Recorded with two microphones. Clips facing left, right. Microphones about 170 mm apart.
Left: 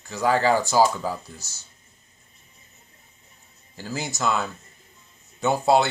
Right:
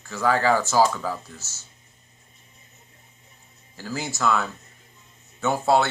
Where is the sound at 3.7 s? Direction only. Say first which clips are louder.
Even; 20° left (ahead or behind).